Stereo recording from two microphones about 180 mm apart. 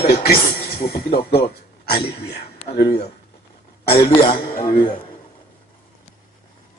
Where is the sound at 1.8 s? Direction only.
60° left (ahead or behind).